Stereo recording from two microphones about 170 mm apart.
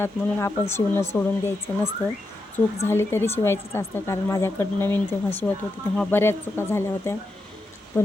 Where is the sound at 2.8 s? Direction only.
15° left (ahead or behind).